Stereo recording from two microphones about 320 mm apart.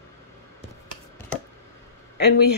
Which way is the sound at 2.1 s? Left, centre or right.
Left.